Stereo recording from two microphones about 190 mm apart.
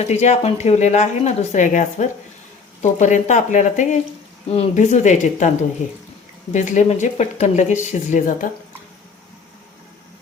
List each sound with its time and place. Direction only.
0.1 s speech: 35° left (ahead or behind)